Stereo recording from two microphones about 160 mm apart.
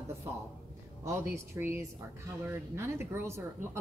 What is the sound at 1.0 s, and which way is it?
Speech, 15° right (ahead or behind).